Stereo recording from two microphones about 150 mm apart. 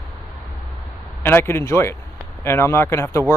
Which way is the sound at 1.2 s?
15° left (ahead or behind).